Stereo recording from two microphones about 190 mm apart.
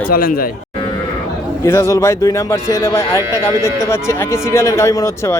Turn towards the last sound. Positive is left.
turn(degrees=15)  # may be behind; listen again after turning